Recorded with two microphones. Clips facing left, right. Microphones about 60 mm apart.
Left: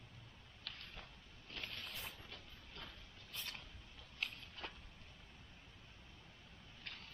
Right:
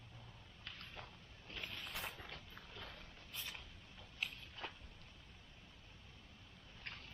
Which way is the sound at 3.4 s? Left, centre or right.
Centre.